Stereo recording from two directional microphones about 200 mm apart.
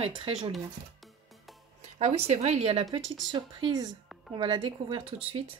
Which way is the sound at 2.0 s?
30° right (ahead or behind).